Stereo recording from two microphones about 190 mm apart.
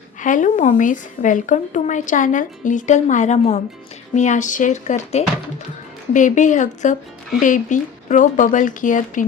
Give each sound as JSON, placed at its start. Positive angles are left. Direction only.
{"t": 0.2, "sound": "a woman's voice", "side_deg": 45}